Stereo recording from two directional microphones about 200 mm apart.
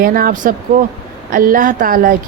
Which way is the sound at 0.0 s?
45° right (ahead or behind).